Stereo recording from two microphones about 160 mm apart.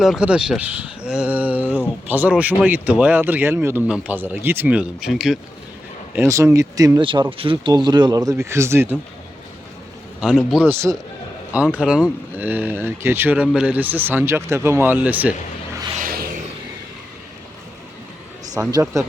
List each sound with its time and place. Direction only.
0.0 s speech: 5° right (ahead or behind)
6.1 s speech: 20° right (ahead or behind)
7.0 s speech: 30° right (ahead or behind); by 8.9 s 15° right (ahead or behind)
10.2 s speech: centre (ahead or behind)
10.7 s speech: 15° right (ahead or behind)
16.0 s a sound: 65° right (ahead or behind)
18.7 s speech: 20° right (ahead or behind)